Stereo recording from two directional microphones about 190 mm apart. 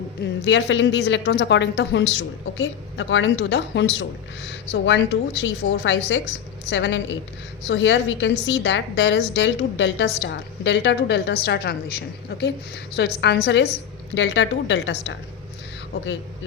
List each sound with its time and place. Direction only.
0.2 s a woman's voice: 65° left (ahead or behind)